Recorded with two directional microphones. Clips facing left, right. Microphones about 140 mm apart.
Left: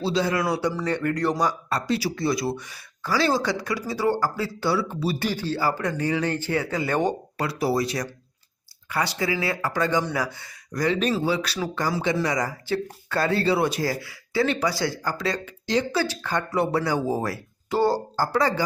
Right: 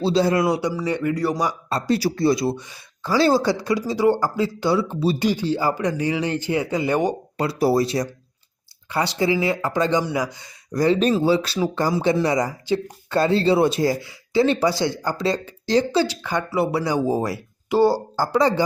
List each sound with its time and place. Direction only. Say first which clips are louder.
0.0 s speech: right 5 dB; 35° right (ahead or behind)
0.4 s speech: right 3 dB; 20° right (ahead or behind)
0.7 s speech: right 2 dB; 10° right (ahead or behind)
1.9 s speech: right 6 dB; 40° right (ahead or behind); by 7.4 s 15° right (ahead or behind)
7.4 s speech: right 5 dB; 35° right (ahead or behind); by 10.8 s 20° right (ahead or behind)
10.8 s speech: right 5 dB; 30° right (ahead or behind)
16.0 s speech: right 4 dB; 15° right (ahead or behind)